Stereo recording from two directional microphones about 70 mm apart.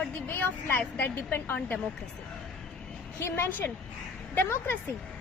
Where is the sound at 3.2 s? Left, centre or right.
Left.